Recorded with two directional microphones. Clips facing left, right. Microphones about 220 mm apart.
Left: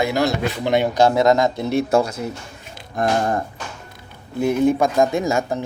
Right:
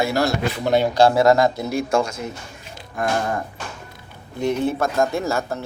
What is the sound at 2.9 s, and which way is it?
Speech, 35° left (ahead or behind).